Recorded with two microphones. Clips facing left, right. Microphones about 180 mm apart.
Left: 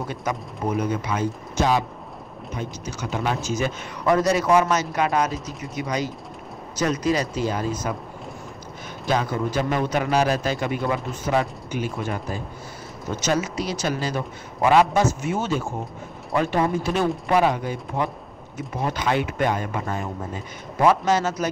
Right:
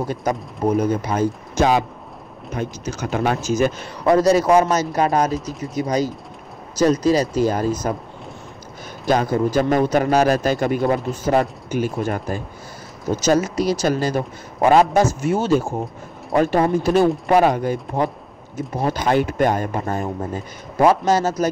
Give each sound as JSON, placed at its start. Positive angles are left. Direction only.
{"t": 0.1, "sound": "speech", "side_deg": -40}
{"t": 1.6, "sound": "speech", "side_deg": -60}
{"t": 5.3, "sound": "speech", "side_deg": 0}
{"t": 5.6, "sound": "speech", "side_deg": -40}
{"t": 9.0, "sound": "speech", "side_deg": -40}